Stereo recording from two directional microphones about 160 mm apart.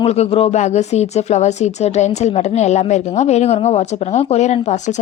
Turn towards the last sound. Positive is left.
turn(degrees=45)  # may be behind; listen again after turning